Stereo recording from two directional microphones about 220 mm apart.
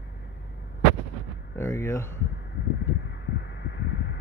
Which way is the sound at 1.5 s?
10° left (ahead or behind).